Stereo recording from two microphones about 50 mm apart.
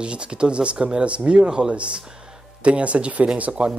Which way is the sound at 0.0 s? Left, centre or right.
Right.